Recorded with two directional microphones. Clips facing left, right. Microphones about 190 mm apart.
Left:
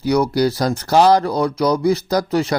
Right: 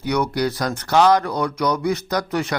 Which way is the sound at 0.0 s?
35° left (ahead or behind).